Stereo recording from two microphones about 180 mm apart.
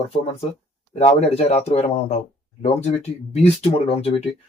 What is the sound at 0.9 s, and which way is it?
Speech, 35° left (ahead or behind).